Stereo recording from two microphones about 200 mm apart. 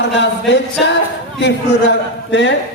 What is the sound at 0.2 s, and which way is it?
A man's voice, 65° left (ahead or behind).